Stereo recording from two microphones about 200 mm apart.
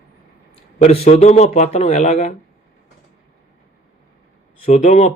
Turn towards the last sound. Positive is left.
turn(degrees=35)  # may be behind; listen again after turning